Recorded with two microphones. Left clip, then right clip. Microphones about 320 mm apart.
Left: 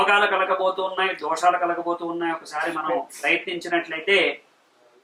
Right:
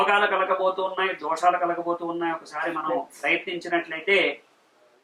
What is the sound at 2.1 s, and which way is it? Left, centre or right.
Speech, centre.